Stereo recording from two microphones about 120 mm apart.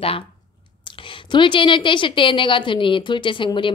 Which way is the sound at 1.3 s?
40° left (ahead or behind).